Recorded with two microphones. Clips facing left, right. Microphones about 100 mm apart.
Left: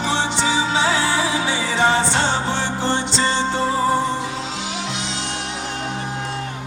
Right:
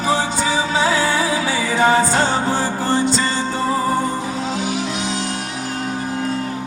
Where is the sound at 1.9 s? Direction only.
40° right (ahead or behind).